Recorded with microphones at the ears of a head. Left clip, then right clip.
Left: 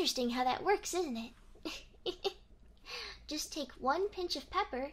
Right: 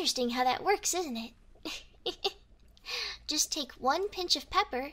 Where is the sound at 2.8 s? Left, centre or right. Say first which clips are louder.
Right 8 dB; right.